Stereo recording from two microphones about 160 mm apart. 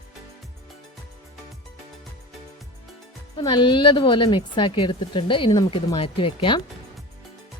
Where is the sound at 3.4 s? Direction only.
30° left (ahead or behind).